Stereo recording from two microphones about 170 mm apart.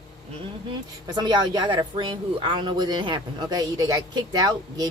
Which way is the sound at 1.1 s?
25° right (ahead or behind).